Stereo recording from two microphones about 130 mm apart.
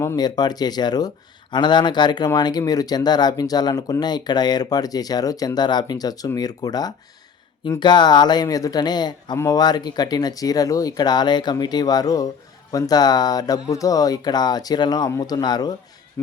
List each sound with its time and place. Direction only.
0.2 s speech: 30° left (ahead or behind)
16.2 s speech: 20° left (ahead or behind)